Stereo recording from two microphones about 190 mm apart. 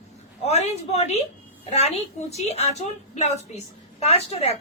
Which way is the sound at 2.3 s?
35° left (ahead or behind).